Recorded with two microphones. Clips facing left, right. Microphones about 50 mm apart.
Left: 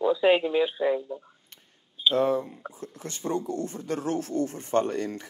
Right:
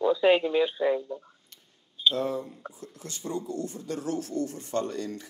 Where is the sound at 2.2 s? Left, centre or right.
Left.